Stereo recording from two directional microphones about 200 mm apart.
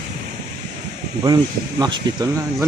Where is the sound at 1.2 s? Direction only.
20° right (ahead or behind).